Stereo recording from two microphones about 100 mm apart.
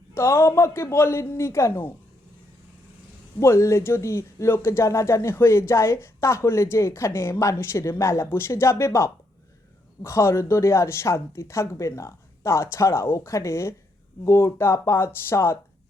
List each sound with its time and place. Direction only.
0.1 s speech: 25° left (ahead or behind)
3.4 s speech: 25° left (ahead or behind)